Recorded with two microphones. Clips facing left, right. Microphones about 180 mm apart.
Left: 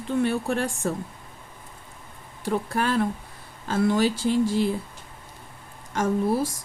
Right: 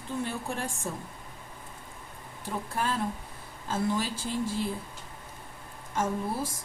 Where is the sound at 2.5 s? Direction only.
75° left (ahead or behind).